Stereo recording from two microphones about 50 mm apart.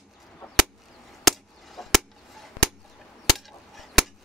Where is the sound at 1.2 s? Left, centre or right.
Centre.